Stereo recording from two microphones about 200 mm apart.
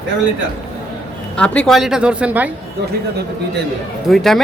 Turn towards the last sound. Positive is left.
turn(degrees=0)  # may be behind; listen again after turning